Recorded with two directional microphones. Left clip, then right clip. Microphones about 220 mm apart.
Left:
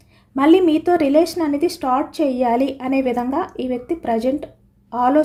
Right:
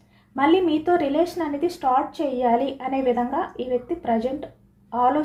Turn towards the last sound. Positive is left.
turn(degrees=55)  # may be behind; listen again after turning